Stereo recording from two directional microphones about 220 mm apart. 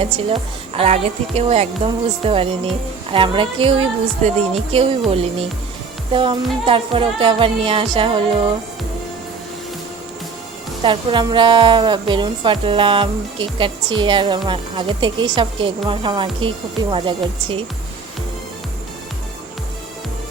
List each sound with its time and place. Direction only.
0.0 s speech: 25° right (ahead or behind)
10.8 s speech: 20° right (ahead or behind)